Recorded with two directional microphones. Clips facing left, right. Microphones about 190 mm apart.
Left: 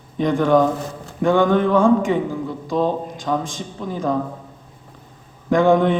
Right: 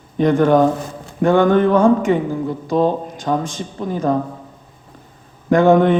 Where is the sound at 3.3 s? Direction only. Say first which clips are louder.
Right 3 dB; 45° right (ahead or behind).